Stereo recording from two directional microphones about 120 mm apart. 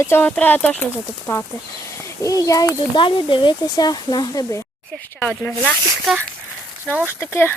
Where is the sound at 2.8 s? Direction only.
45° left (ahead or behind).